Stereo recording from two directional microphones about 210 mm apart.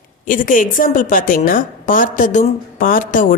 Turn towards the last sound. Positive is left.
turn(degrees=40)  # may be behind; listen again after turning